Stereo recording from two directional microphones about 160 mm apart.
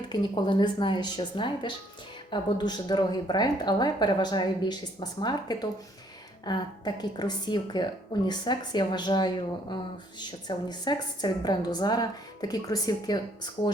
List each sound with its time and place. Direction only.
0.1 s a woman's voice: 30° left (ahead or behind)